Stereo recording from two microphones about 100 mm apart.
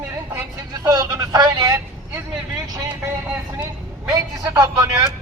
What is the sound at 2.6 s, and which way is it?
Vehicle, 40° right (ahead or behind).